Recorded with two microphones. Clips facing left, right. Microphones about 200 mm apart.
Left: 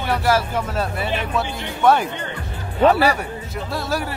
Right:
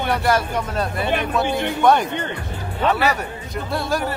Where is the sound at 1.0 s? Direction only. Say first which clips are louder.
Right 3 dB; 55° right (ahead or behind).